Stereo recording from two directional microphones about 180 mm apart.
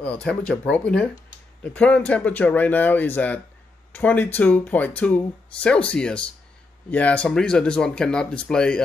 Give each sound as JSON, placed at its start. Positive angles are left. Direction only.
{"t": 0.0, "sound": "speech", "side_deg": 5}